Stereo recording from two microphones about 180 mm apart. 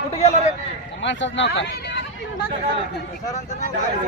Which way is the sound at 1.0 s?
90° left.